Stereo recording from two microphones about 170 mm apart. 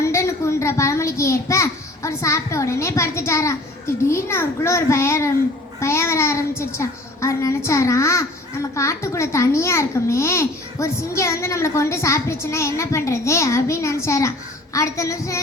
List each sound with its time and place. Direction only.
0.0 s a child's voice: 15° left (ahead or behind)